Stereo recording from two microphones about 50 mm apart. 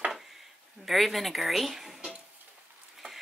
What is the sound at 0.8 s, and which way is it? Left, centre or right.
Speech, centre.